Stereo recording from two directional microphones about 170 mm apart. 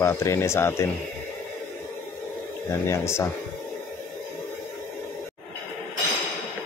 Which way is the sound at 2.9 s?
15° left (ahead or behind).